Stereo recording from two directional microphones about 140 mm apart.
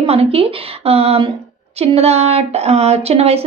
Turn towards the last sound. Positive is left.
turn(degrees=-45)  # may be behind; listen again after turning